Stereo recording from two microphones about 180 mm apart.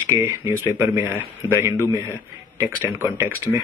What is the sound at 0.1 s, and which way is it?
Speech, 15° right (ahead or behind).